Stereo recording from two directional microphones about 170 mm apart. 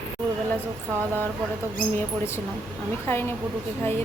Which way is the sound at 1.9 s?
15° left (ahead or behind).